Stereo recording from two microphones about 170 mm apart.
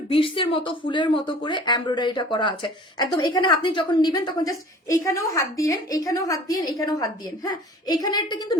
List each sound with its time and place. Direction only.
0.1 s speech: 30° left (ahead or behind)